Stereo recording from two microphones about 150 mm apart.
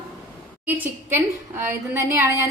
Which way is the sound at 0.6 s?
10° right (ahead or behind).